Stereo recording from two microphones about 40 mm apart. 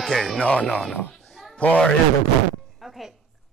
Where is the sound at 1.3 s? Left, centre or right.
Centre.